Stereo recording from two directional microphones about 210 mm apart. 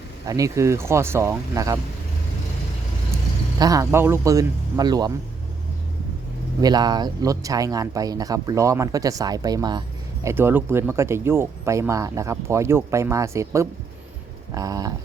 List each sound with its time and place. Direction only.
0.3 s speech: 15° right (ahead or behind)
3.6 s speech: 15° right (ahead or behind)
6.6 s speech: 20° right (ahead or behind)